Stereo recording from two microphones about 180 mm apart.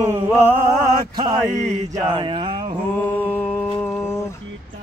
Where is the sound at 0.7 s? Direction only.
25° right (ahead or behind).